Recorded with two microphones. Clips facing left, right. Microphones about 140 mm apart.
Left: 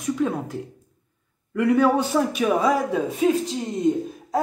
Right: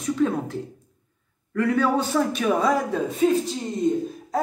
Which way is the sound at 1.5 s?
15° left (ahead or behind).